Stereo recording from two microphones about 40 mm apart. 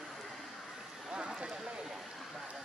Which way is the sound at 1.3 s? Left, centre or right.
Centre.